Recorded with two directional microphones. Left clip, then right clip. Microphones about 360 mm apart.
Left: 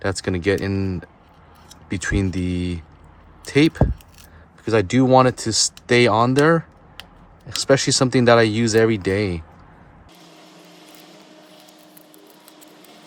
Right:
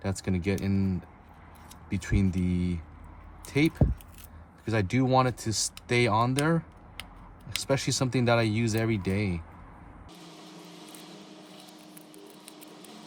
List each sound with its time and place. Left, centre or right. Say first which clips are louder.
0.0 s speech: left 11 dB; left
2.3 s speech: left 7 dB; left
10.3 s a sound: left 2 dB; centre